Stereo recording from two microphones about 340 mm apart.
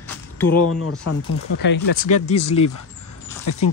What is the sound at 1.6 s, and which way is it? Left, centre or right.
Speech, left.